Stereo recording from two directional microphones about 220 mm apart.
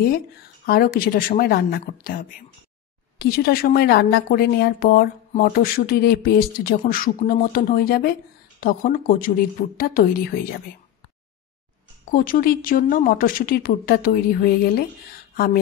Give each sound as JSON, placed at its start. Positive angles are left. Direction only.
{"t": 0.7, "sound": "a woman's voice", "side_deg": 40}
{"t": 12.1, "sound": "speech", "side_deg": 40}